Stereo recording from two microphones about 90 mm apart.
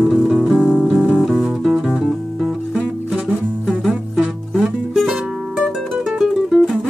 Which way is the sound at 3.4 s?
20° right (ahead or behind).